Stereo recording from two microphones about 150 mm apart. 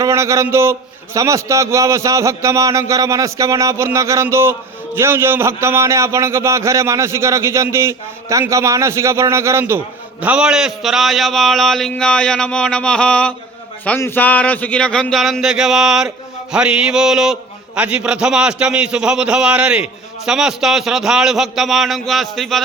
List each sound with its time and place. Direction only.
0.0 s a man's voice: 20° right (ahead or behind); by 22.6 s centre (ahead or behind)